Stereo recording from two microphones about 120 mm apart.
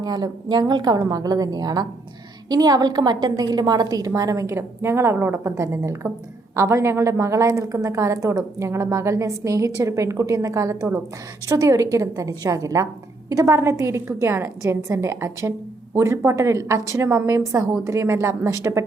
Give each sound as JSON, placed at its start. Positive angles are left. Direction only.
{"t": 0.0, "sound": "a woman's voice", "side_deg": -35}